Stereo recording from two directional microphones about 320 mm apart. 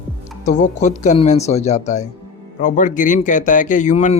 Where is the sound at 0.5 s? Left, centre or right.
Left.